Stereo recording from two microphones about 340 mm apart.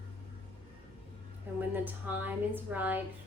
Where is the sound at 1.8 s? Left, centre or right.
Centre.